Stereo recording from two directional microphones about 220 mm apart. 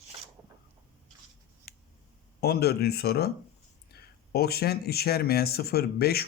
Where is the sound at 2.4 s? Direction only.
45° left (ahead or behind).